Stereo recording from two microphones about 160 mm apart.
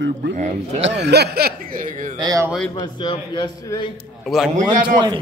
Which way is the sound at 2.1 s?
25° right (ahead or behind).